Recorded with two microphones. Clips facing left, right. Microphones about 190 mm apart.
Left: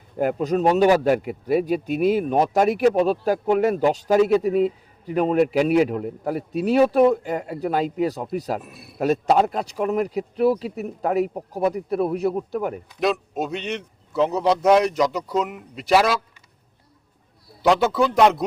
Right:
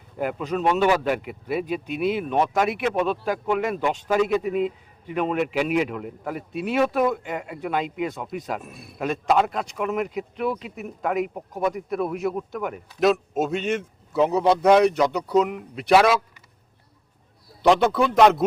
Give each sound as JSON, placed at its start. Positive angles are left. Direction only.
{"t": 0.2, "sound": "a man's voice", "side_deg": 40}
{"t": 8.6, "sound": "a man's voice", "side_deg": 5}
{"t": 9.0, "sound": "a man's voice", "side_deg": 40}
{"t": 13.0, "sound": "a man's voice", "side_deg": 0}
{"t": 17.6, "sound": "a man's voice", "side_deg": 5}